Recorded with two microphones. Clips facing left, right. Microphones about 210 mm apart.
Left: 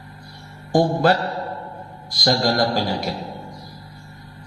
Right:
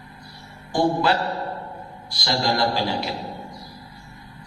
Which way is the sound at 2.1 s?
45° left (ahead or behind).